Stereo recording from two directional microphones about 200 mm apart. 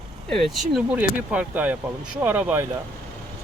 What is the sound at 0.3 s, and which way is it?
Speech, centre (ahead or behind).